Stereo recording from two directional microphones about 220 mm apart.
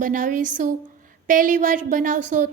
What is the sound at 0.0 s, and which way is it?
A woman's voice, 35° right (ahead or behind).